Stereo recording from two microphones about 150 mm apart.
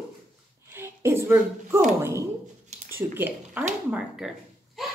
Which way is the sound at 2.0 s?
20° right (ahead or behind).